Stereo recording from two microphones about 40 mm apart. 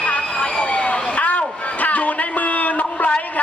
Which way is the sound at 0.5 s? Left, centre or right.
Left.